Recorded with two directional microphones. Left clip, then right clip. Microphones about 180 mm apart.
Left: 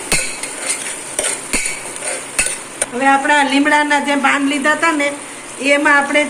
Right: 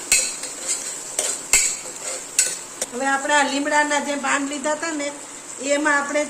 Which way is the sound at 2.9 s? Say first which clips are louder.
Left 7 dB; 30° right (ahead or behind).